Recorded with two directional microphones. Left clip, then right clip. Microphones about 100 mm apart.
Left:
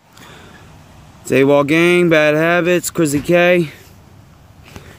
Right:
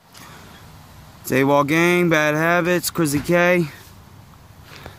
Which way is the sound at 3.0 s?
15° right (ahead or behind).